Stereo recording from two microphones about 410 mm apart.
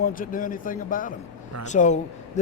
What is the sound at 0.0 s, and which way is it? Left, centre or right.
A man's voice, centre.